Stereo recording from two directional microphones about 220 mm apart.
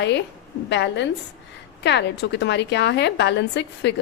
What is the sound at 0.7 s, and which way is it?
A woman's voice, 55° left (ahead or behind).